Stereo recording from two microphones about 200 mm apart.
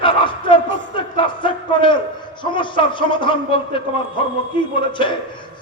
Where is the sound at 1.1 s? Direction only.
25° left (ahead or behind).